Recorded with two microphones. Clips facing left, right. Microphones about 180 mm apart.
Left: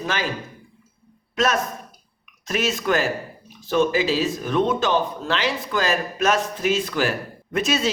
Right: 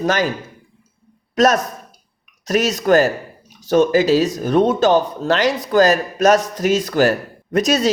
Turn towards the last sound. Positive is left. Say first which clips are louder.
# right 6 dB
turn(degrees=-40)  # may be behind; listen again after turning